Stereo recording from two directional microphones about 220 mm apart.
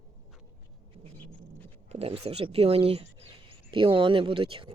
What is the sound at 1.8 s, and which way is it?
Speech, 25° right (ahead or behind).